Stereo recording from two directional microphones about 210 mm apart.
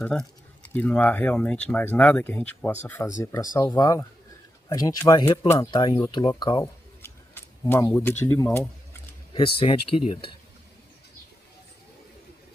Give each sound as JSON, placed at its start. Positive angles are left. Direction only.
{"t": 0.0, "sound": "speech", "side_deg": 5}
{"t": 9.3, "sound": "speech", "side_deg": 25}